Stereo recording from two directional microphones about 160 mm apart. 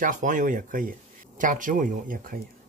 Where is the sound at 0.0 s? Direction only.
55° right (ahead or behind).